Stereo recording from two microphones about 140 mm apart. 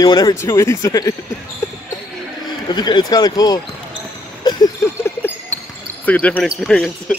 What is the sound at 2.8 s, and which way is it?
Speech, 30° left (ahead or behind).